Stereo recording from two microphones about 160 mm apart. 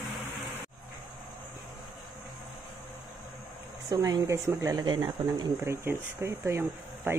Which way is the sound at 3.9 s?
25° right (ahead or behind).